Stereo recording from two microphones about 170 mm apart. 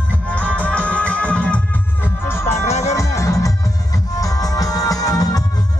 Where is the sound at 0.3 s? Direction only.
10° left (ahead or behind).